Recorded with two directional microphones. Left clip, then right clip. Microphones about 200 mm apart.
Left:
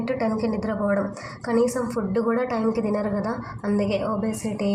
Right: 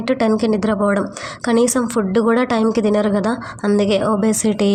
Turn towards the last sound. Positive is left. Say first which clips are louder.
# right 10 dB
turn(degrees=-40)  # may be behind; listen again after turning